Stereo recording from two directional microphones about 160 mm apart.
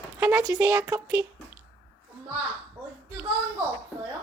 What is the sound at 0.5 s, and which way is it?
Speech, 10° right (ahead or behind).